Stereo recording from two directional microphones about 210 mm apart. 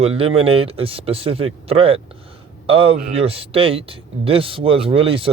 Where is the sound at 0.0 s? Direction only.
25° right (ahead or behind).